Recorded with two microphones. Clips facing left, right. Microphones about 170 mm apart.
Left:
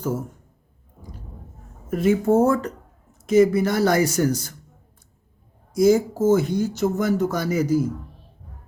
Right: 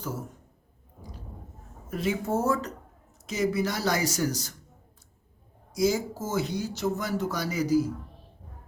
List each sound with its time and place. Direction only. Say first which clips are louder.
1.9 s speech: left 10 dB; 50° left (ahead or behind)
5.7 s speech: left 9 dB; 50° left (ahead or behind)